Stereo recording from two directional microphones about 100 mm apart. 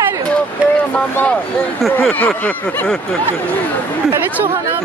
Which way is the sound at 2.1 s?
20° left (ahead or behind).